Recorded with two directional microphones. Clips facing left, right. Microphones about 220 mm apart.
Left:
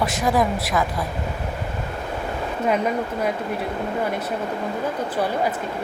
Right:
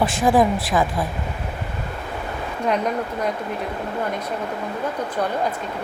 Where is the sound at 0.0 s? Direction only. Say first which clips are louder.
Right 3 dB; 30° right (ahead or behind).